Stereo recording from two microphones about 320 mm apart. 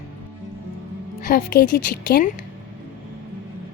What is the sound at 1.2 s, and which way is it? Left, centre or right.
A woman's voice, left.